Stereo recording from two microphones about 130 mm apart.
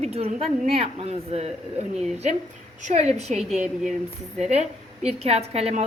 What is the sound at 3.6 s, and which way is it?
Speech, 5° right (ahead or behind).